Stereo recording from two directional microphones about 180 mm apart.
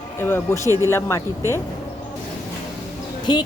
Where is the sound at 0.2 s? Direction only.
10° left (ahead or behind).